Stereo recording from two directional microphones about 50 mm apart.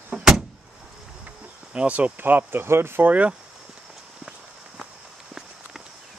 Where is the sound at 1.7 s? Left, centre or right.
Right.